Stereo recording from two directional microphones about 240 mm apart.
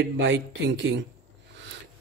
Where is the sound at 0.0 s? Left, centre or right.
Right.